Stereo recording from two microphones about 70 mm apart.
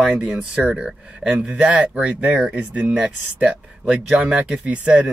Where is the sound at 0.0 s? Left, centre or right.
Centre.